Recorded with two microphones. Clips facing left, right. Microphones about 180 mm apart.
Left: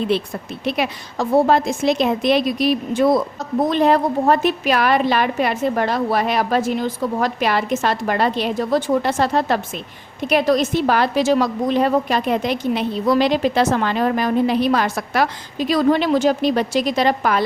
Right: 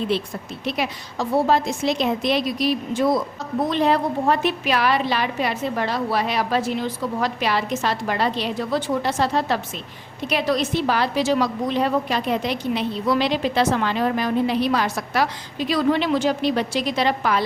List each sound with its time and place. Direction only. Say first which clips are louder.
0.6 s a woman's voice: left 4 dB; 60° left (ahead or behind)
3.6 s a woman's voice: left 4 dB; 45° left (ahead or behind)